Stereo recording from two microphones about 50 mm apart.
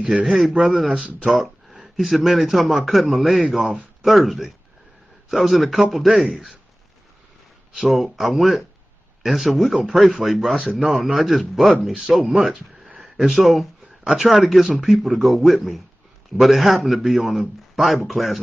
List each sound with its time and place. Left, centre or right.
0.0 s a man's voice: right
1.4 s a man's voice: centre
7.8 s speech: centre
10.5 s a man's voice: centre